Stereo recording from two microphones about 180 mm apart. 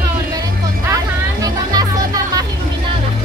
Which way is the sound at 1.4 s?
20° right (ahead or behind).